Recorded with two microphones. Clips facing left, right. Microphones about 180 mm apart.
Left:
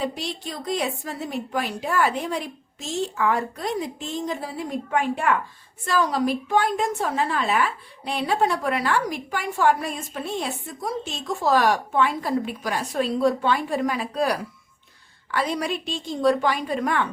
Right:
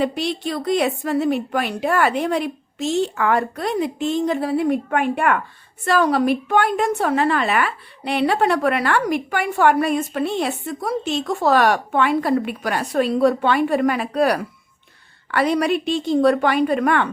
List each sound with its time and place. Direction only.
0.0 s a woman's voice: 70° right (ahead or behind)